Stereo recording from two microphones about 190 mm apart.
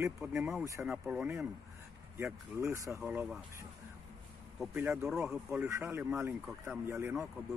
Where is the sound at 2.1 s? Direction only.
15° right (ahead or behind).